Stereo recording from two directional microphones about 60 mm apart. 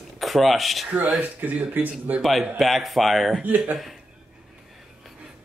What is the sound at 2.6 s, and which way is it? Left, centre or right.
Speech, centre.